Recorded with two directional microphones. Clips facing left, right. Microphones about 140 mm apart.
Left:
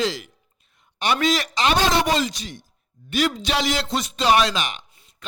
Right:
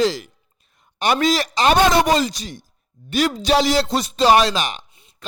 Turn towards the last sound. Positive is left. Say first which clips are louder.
# right 3 dB
turn(degrees=-35)  # may be behind; listen again after turning